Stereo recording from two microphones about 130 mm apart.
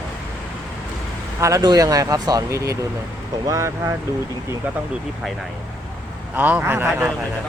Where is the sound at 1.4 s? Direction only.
30° right (ahead or behind).